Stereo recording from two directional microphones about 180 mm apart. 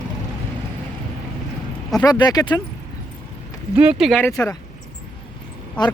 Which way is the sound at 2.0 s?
20° left (ahead or behind).